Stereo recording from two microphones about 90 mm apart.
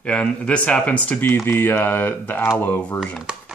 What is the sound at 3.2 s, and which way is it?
Chopping, 10° right (ahead or behind).